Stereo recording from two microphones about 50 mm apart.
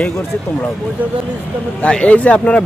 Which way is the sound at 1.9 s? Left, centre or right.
Left.